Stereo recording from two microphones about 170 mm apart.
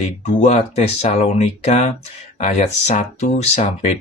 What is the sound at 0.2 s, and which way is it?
Speech, 45° left (ahead or behind).